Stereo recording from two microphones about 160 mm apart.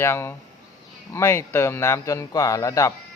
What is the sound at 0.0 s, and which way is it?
A man's voice, 15° left (ahead or behind).